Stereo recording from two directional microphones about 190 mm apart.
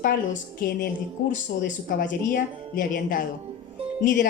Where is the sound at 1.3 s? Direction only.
45° left (ahead or behind).